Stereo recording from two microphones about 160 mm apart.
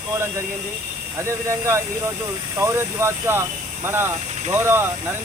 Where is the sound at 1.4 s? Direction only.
20° right (ahead or behind).